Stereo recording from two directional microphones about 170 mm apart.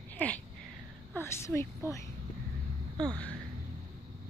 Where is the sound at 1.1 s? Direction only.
15° left (ahead or behind).